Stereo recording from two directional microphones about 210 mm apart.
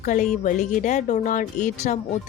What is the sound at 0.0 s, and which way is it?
Speech, 35° left (ahead or behind).